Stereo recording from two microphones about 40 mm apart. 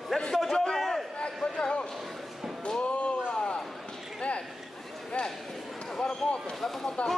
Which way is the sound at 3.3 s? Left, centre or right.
Left.